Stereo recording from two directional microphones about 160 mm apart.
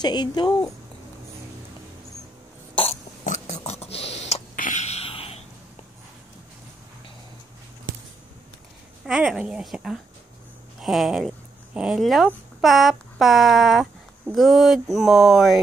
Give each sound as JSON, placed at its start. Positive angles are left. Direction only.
{"t": 0.0, "sound": "a woman's voice", "side_deg": 25}
{"t": 2.7, "sound": "burping", "side_deg": 35}
{"t": 3.3, "sound": "a sound", "side_deg": 50}
{"t": 9.0, "sound": "speech", "side_deg": -5}